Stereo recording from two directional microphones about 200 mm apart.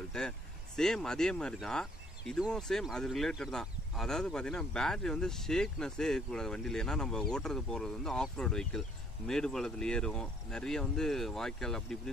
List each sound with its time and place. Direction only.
0.1 s speech: 5° left (ahead or behind)